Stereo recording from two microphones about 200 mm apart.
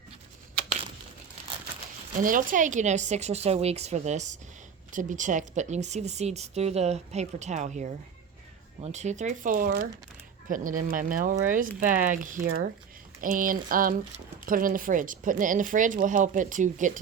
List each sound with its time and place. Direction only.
2.2 s speech: 40° right (ahead or behind)
13.2 s a sound: 40° right (ahead or behind)
14.4 s speech: 45° right (ahead or behind)